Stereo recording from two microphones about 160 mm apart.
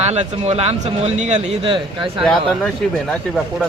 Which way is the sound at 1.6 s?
30° right (ahead or behind).